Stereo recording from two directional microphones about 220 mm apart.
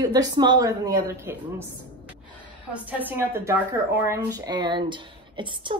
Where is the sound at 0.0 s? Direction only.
15° right (ahead or behind).